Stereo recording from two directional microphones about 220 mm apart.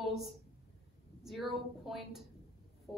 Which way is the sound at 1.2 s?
Centre (ahead or behind).